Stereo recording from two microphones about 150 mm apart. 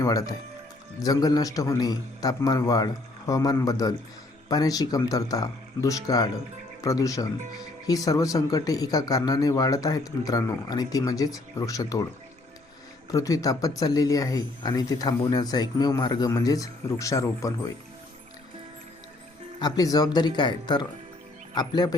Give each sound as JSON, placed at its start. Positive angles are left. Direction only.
{"t": 0.0, "sound": "speech", "side_deg": 25}
{"t": 13.1, "sound": "speech", "side_deg": 20}
{"t": 19.5, "sound": "speech", "side_deg": 25}